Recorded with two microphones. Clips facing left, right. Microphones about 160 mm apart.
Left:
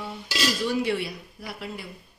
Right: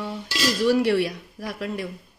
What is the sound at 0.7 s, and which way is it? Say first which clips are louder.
A woman's voice: right 6 dB; 75° right (ahead or behind).